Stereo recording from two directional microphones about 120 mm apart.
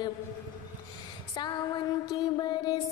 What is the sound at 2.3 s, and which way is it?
Music, 35° left (ahead or behind).